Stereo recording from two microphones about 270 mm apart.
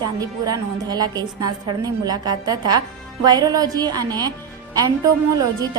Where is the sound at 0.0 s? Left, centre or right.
Centre.